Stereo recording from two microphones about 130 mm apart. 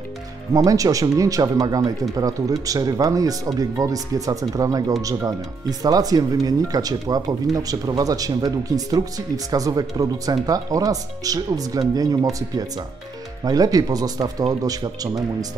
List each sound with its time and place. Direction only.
0.6 s speech: 25° right (ahead or behind)